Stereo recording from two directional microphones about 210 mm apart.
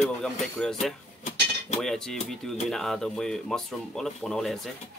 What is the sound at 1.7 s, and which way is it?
Speech, centre (ahead or behind).